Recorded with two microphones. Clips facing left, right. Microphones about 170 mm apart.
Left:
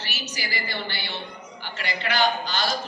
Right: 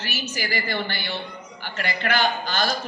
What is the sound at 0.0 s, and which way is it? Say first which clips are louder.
A woman's voice: right 4 dB; 50° right (ahead or behind).